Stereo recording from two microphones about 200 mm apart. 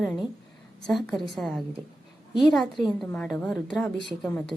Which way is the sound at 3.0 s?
5° left (ahead or behind).